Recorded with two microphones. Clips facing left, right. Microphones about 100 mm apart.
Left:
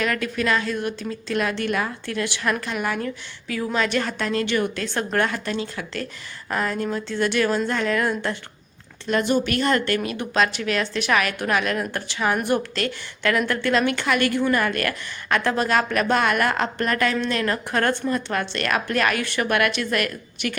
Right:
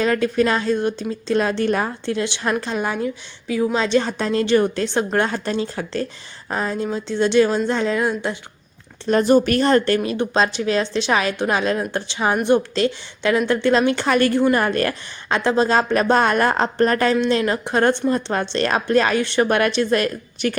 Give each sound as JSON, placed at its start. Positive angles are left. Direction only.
{"t": 0.0, "sound": "a woman's voice", "side_deg": -30}
{"t": 6.5, "sound": "a woman's voice", "side_deg": -20}
{"t": 9.0, "sound": "a woman's voice", "side_deg": -35}